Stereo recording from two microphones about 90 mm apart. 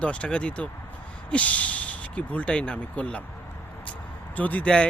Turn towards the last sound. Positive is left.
turn(degrees=15)  # may be behind; listen again after turning